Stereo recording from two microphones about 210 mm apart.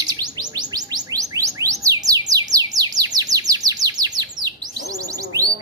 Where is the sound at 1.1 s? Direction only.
15° right (ahead or behind).